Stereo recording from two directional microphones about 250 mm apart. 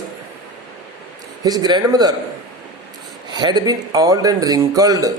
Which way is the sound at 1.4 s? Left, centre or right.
Centre.